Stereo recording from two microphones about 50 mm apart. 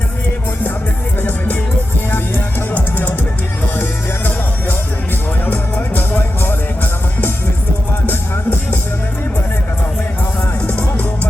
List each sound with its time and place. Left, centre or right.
2.0 s music: left
5.5 s music: left
8.0 s music: left
10.7 s music: left